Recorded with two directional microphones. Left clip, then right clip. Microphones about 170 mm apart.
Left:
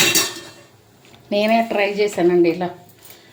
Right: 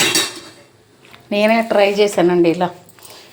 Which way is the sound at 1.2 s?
5° right (ahead or behind).